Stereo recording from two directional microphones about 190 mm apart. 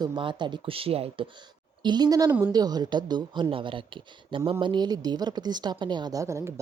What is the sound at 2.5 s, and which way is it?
A woman's voice, 20° right (ahead or behind).